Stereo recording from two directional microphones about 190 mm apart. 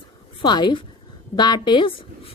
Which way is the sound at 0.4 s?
25° left (ahead or behind).